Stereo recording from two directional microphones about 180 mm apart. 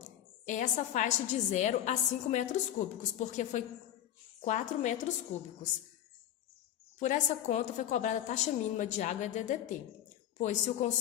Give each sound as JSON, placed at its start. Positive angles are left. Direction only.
{"t": 0.0, "sound": "a woman's voice", "side_deg": 45}
{"t": 7.0, "sound": "a woman's voice", "side_deg": 40}